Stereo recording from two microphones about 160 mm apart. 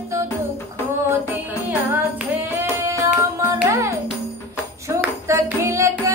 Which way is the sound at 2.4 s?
20° right (ahead or behind).